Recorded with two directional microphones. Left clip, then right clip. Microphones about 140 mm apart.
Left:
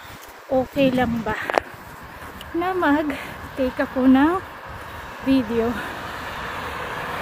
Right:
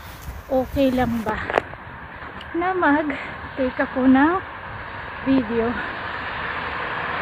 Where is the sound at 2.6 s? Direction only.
25° left (ahead or behind).